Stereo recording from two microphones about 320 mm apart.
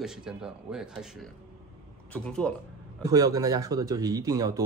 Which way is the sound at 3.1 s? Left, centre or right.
Centre.